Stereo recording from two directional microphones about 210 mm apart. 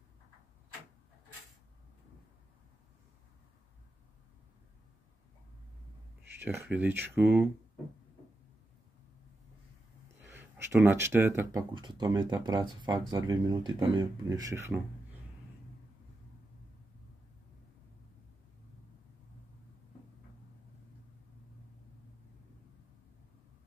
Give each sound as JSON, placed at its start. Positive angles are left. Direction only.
{"t": 6.2, "sound": "speech", "side_deg": -10}
{"t": 10.3, "sound": "a sound", "side_deg": -10}
{"t": 10.8, "sound": "speech", "side_deg": -10}
{"t": 11.7, "sound": "speech", "side_deg": -20}